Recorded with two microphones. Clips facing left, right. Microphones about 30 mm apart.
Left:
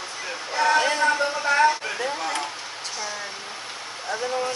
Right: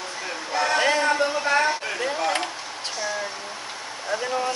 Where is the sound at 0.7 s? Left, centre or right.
Centre.